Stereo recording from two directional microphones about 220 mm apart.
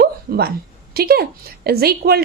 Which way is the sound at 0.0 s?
45° right (ahead or behind).